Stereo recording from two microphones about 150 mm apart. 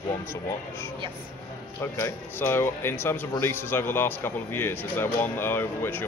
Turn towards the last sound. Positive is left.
turn(degrees=15)  # may be behind; listen again after turning